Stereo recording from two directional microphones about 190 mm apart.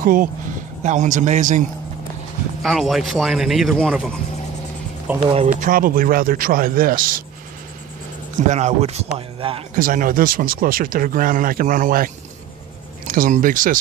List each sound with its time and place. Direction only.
0.0 s speech: 45° right (ahead or behind)
2.6 s speech: centre (ahead or behind)
5.1 s speech: 5° right (ahead or behind)
5.6 s speech: 45° right (ahead or behind)
8.5 s speech: 35° right (ahead or behind)
9.8 s speech: 45° right (ahead or behind)